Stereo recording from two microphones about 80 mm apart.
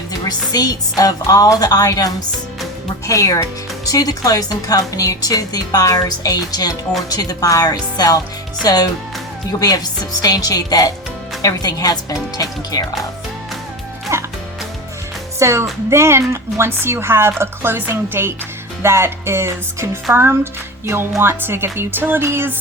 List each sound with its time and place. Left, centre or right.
0.3 s speech: left
14.1 s music: right
15.4 s a woman's voice: right